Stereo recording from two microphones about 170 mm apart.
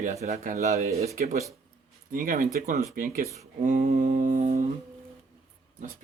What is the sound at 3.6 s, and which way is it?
Mantra, 50° right (ahead or behind).